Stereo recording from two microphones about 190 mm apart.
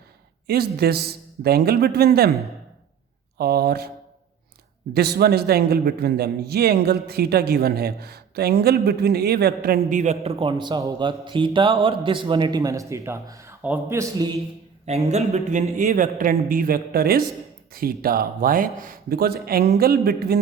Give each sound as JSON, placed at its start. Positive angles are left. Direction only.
{"t": 0.4, "sound": "a man's voice", "side_deg": -55}
{"t": 3.3, "sound": "a man's voice", "side_deg": -55}
{"t": 4.9, "sound": "a man's voice", "side_deg": -55}
{"t": 14.8, "sound": "a man's voice", "side_deg": -35}